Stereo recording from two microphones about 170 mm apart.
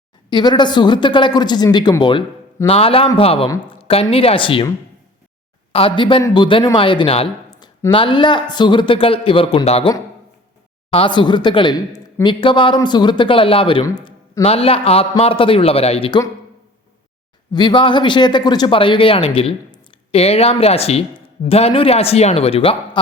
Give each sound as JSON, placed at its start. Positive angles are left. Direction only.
{"t": 0.3, "sound": "speech", "side_deg": 25}
{"t": 5.7, "sound": "speech", "side_deg": 30}
{"t": 10.9, "sound": "speech", "side_deg": 30}
{"t": 17.5, "sound": "speech", "side_deg": 25}